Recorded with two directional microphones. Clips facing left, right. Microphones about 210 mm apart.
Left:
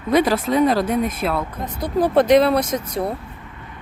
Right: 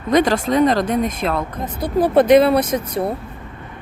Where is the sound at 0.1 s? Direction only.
5° left (ahead or behind).